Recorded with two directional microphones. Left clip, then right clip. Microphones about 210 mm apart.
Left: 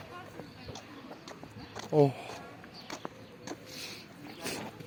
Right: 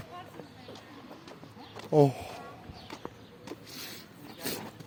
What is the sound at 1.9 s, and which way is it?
Speech, 50° right (ahead or behind).